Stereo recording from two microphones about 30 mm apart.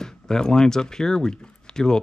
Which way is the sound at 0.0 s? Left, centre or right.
Left.